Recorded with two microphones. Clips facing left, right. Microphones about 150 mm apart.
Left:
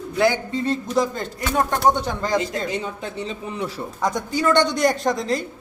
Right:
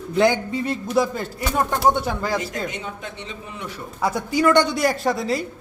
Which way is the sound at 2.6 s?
35° left (ahead or behind).